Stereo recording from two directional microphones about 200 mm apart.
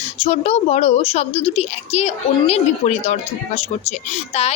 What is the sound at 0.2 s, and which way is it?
A woman's voice, 30° left (ahead or behind).